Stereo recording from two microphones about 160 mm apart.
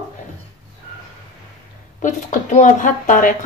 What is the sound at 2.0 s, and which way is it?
Speech, 50° left (ahead or behind).